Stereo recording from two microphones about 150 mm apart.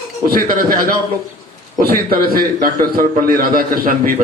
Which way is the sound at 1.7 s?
80° right.